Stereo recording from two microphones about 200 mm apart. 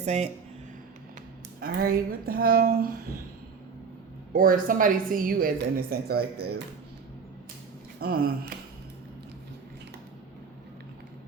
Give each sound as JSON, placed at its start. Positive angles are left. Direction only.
{"t": 0.0, "sound": "speech", "side_deg": -35}
{"t": 1.6, "sound": "a woman's voice", "side_deg": -45}
{"t": 4.3, "sound": "a woman's voice", "side_deg": -45}
{"t": 8.0, "sound": "speech", "side_deg": -55}